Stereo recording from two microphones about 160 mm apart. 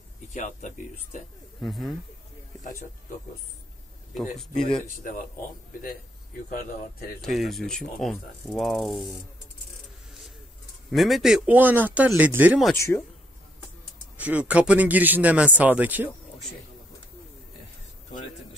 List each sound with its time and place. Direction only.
0.3 s speech: 50° left (ahead or behind)
1.6 s mechanisms: centre (ahead or behind)
4.4 s mechanisms: 5° left (ahead or behind)
7.2 s mechanisms: centre (ahead or behind)
10.9 s a man's voice: centre (ahead or behind)
12.7 s speech: 15° left (ahead or behind)
14.1 s a man's voice: 10° right (ahead or behind)